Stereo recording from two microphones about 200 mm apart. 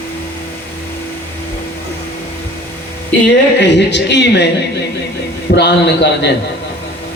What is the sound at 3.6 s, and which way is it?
Speech, 60° left (ahead or behind).